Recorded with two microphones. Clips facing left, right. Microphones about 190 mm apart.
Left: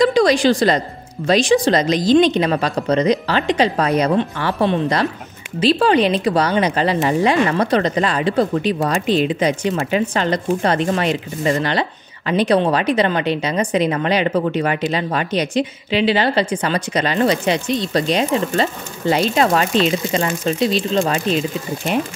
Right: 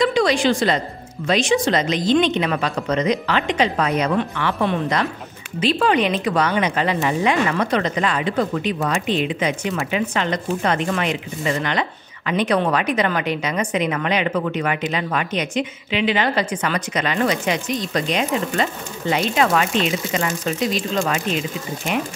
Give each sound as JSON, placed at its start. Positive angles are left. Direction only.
{"t": 0.0, "sound": "speech", "side_deg": 40}